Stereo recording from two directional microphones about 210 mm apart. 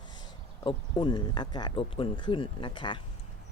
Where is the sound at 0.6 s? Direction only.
20° left (ahead or behind).